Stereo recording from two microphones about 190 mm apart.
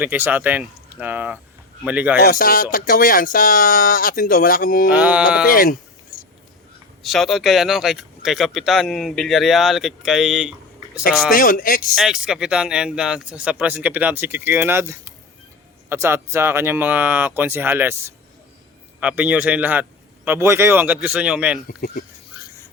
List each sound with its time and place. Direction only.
0.0 s speech: 10° right (ahead or behind)
2.2 s speech: 50° left (ahead or behind)
4.9 s speech: 5° right (ahead or behind)
5.5 s speech: 50° left (ahead or behind)
7.0 s speech: centre (ahead or behind)
11.3 s speech: 50° left (ahead or behind)
11.9 s speech: centre (ahead or behind)
21.7 s speech: 55° left (ahead or behind)